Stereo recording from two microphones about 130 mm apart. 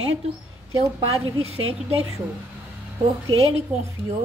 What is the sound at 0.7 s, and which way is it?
A woman's voice, 45° right (ahead or behind).